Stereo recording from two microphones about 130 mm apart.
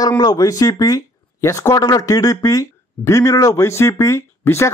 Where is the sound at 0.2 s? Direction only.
30° left (ahead or behind).